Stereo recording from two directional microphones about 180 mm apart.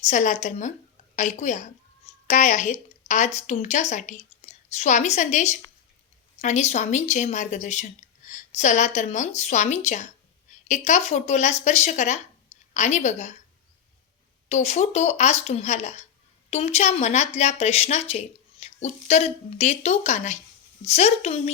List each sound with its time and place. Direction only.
0.1 s a woman's voice: 45° left (ahead or behind)
14.5 s speech: 35° left (ahead or behind)